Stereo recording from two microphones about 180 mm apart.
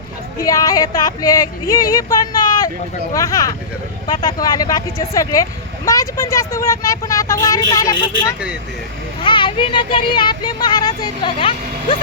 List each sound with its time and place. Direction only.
0.4 s speech: 20° left (ahead or behind)
9.2 s speech: 25° left (ahead or behind)